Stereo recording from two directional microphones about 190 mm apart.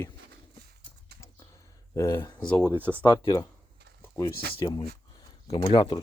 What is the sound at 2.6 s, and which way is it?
Speech, 10° right (ahead or behind).